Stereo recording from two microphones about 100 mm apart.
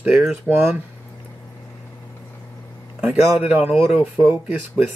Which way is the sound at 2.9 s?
10° right (ahead or behind).